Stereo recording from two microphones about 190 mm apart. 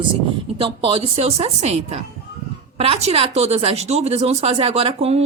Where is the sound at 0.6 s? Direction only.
30° right (ahead or behind).